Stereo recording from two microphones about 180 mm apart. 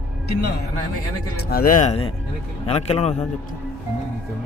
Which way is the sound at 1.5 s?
50° left (ahead or behind).